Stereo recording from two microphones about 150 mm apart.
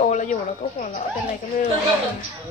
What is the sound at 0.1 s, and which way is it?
Speech, 55° left (ahead or behind).